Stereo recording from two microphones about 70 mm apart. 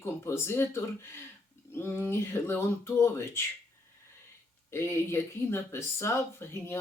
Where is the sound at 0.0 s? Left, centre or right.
Left.